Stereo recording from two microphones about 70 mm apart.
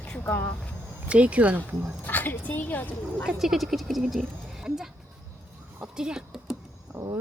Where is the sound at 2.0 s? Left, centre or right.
Left.